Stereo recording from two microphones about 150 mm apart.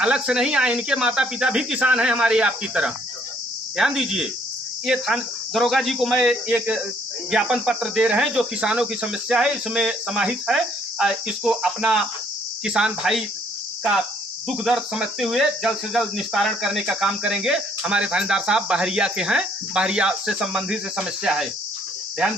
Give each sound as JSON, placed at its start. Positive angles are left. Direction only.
{"t": 0.0, "sound": "cricket", "side_deg": -5}
{"t": 14.4, "sound": "cricket", "side_deg": 0}